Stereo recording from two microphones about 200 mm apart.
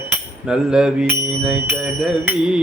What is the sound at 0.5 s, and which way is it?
Bicycle bell, 5° right (ahead or behind).